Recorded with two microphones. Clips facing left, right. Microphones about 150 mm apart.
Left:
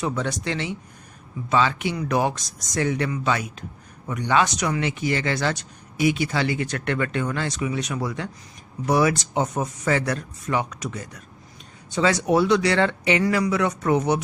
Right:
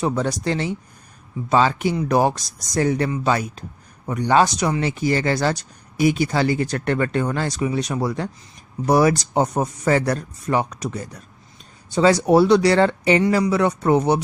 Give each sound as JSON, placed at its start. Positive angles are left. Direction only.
{"t": 0.0, "sound": "speech", "side_deg": -35}